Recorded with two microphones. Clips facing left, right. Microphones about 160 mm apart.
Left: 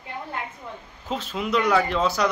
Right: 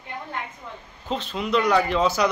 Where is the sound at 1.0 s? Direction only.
5° left (ahead or behind).